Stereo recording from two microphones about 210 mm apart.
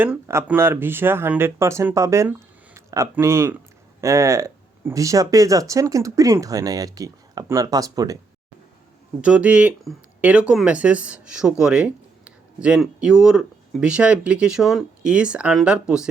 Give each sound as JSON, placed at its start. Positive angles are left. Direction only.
{"t": 0.0, "sound": "speech", "side_deg": -10}
{"t": 9.2, "sound": "speech", "side_deg": -5}